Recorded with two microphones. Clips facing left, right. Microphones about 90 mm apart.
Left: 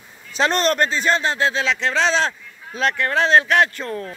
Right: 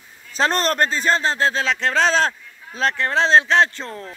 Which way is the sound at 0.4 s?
35° right (ahead or behind).